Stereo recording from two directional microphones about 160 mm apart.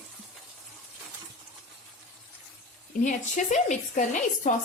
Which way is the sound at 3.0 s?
50° left (ahead or behind).